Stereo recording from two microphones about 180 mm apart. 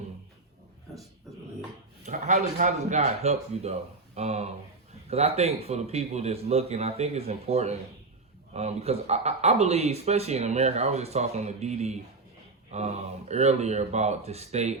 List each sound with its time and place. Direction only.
2.0 s speech: 40° right (ahead or behind)